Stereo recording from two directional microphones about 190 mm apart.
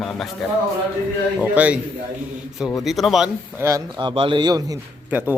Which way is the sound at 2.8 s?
Centre (ahead or behind).